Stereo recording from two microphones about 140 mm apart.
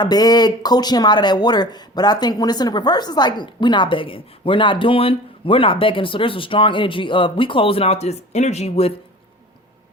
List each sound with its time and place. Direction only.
0.0 s speech: 30° left (ahead or behind); by 8.9 s 50° left (ahead or behind)